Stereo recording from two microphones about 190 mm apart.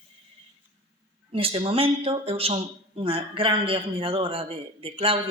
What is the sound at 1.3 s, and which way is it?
Speech, 30° right (ahead or behind).